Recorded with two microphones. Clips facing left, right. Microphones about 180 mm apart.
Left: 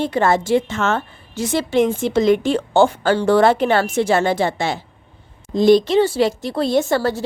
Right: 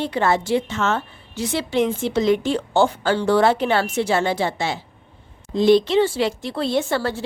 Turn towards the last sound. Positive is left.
turn(degrees=40)  # may be behind; listen again after turning